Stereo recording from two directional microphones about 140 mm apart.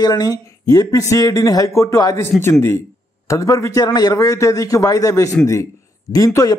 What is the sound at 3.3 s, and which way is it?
A man's voice, 20° left (ahead or behind).